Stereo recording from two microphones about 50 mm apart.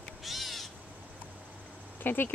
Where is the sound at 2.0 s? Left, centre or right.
Left.